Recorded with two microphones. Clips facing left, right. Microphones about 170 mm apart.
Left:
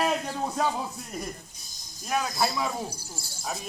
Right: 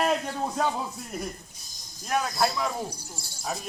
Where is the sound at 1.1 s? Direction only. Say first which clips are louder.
Right 1 dB; 5° right (ahead or behind).